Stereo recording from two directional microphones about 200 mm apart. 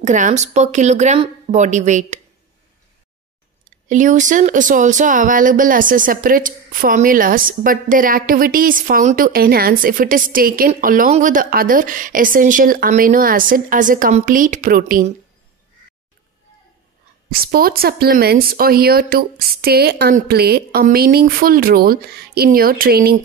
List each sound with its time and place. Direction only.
0.0 s speech: 35° right (ahead or behind)
3.9 s speech: 40° right (ahead or behind)
17.3 s speech: 50° right (ahead or behind)